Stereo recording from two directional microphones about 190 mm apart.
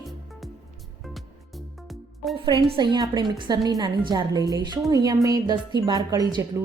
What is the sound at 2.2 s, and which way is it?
Speech, centre (ahead or behind).